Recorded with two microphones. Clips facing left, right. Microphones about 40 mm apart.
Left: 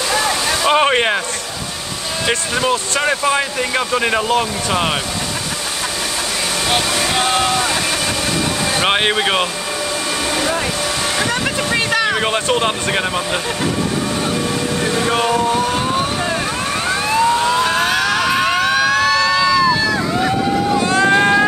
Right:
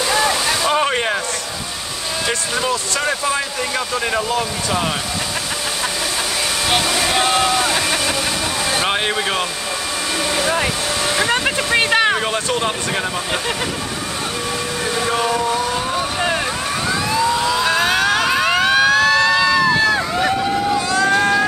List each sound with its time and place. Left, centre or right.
0.1 s waterfall: centre
0.7 s boat: left
2.2 s speech: centre
6.7 s speech: centre
8.8 s speech: left
11.2 s a sound: centre
12.4 s speech: left
15.0 s vehicle: centre; by 16.1 s left
16.8 s emergency vehicle: left
17.8 s a sound: right
18.3 s emergency vehicle: left
18.6 s emergency vehicle: right
20.0 s boat: centre
20.8 s vehicle: left